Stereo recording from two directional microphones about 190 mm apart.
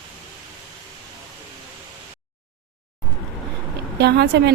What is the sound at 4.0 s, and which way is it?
Speech, 60° right (ahead or behind).